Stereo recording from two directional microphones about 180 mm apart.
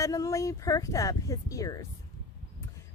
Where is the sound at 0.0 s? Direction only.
15° left (ahead or behind).